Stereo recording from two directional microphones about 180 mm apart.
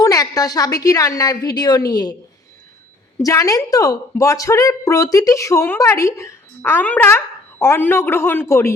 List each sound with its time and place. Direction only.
0.0 s a woman's voice: 20° left (ahead or behind)
3.2 s a woman's voice: 20° left (ahead or behind)